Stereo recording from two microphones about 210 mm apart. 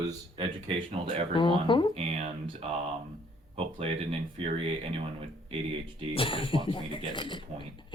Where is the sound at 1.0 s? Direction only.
25° right (ahead or behind).